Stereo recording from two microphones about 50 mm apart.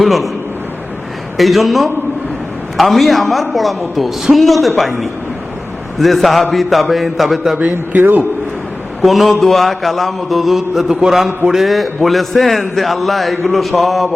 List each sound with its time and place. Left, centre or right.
0.0 s a man's voice: centre
1.4 s a man's voice: centre
7.7 s a man's voice: right
9.0 s a man's voice: centre